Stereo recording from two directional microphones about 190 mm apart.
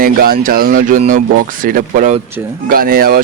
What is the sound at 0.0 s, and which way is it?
Speech, 50° right (ahead or behind).